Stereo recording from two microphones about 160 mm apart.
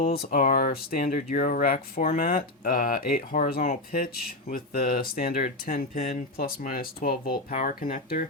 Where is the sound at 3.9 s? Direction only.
70° left (ahead or behind).